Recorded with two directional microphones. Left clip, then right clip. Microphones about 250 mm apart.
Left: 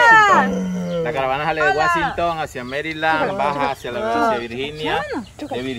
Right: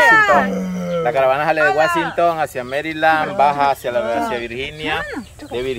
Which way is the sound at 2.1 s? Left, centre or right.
Centre.